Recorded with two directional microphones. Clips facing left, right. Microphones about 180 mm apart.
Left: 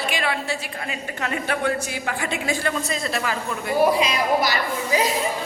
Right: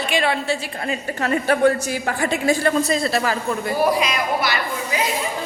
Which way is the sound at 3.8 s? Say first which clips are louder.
Left 2 dB; 25° left (ahead or behind).